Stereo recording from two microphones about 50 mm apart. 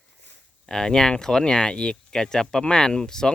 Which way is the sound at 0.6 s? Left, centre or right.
Centre.